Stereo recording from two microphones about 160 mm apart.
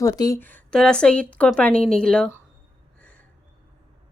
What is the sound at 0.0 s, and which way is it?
Speech, 20° left (ahead or behind).